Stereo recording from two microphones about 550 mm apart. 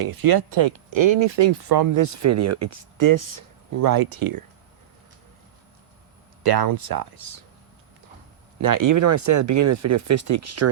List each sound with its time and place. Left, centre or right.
0.0 s speech: right
6.4 s speech: right
8.6 s speech: right